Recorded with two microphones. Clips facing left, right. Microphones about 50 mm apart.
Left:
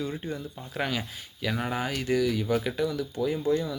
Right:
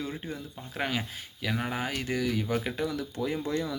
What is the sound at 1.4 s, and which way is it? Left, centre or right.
Speech, centre.